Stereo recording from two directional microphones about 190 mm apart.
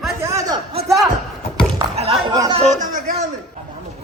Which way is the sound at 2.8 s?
45° right (ahead or behind).